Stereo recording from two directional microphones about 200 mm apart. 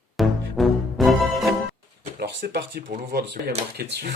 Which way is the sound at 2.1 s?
50° right (ahead or behind).